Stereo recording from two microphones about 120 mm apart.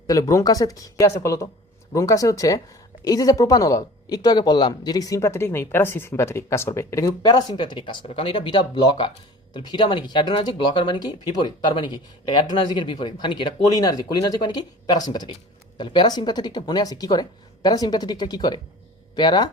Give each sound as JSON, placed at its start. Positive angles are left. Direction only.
{"t": 0.1, "sound": "speech", "side_deg": 30}